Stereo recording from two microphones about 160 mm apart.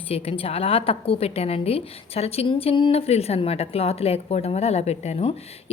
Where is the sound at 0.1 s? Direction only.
40° left (ahead or behind).